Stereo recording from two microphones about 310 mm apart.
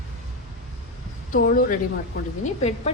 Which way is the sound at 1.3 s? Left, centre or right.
Left.